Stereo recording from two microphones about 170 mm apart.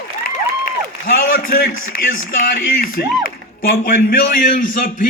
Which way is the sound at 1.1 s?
60° left (ahead or behind).